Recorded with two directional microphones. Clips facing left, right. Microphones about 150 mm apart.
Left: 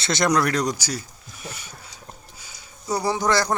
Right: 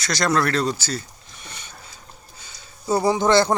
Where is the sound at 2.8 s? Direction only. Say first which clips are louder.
Right 4 dB; 25° right (ahead or behind).